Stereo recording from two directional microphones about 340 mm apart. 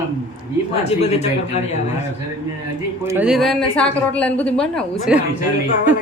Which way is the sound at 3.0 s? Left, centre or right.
Centre.